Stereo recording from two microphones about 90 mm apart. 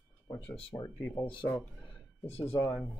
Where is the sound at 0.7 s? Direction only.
40° left (ahead or behind).